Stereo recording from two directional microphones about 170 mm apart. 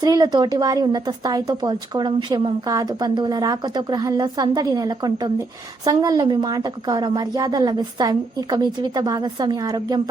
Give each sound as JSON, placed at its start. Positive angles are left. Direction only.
{"t": 0.0, "sound": "a woman's voice", "side_deg": -25}